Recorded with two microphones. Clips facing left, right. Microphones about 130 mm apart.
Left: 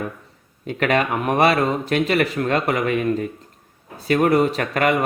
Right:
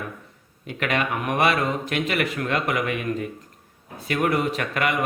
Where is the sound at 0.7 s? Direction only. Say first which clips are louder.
Left 5 dB; 35° left (ahead or behind).